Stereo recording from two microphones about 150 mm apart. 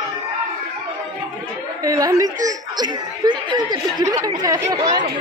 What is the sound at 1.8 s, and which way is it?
A woman's voice, 25° right (ahead or behind).